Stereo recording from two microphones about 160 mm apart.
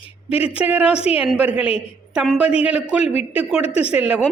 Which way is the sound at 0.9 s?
40° left (ahead or behind).